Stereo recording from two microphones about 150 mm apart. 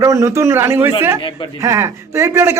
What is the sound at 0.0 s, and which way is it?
Speech, 20° right (ahead or behind).